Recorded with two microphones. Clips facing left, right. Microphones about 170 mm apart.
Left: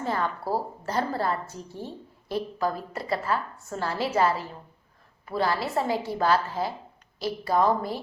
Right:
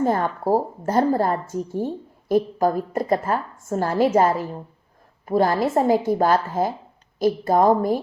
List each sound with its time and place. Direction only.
0.0 s a woman's voice: 45° right (ahead or behind)